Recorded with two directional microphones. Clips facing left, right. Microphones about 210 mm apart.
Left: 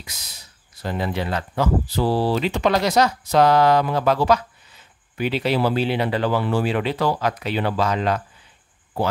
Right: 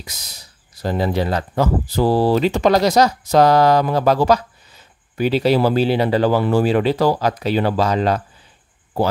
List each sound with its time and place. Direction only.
0.0 s speech: 40° right (ahead or behind)